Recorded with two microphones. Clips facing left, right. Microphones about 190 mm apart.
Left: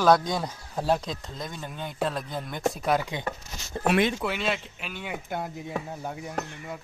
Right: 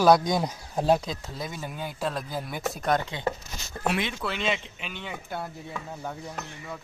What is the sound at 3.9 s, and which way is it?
Speech, 50° left (ahead or behind).